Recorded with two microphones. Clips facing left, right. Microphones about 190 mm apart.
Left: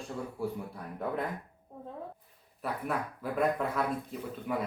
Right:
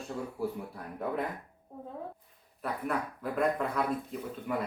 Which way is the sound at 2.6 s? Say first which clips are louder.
Right 1 dB; centre (ahead or behind).